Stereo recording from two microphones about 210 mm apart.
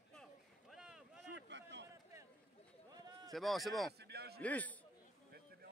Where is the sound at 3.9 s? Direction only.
50° right (ahead or behind).